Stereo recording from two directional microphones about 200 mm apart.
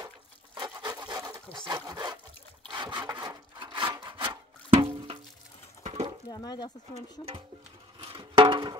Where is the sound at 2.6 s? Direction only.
25° right (ahead or behind).